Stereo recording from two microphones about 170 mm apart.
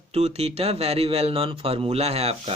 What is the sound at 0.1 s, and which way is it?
Speech, 40° right (ahead or behind).